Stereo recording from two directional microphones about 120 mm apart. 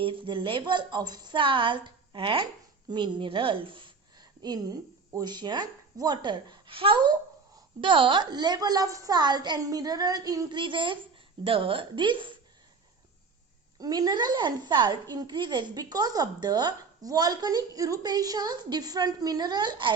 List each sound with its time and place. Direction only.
0.0 s a woman's voice: 45° right (ahead or behind); by 10.6 s 30° right (ahead or behind)
10.6 s a woman's voice: 45° right (ahead or behind)
13.7 s a woman's voice: 35° right (ahead or behind)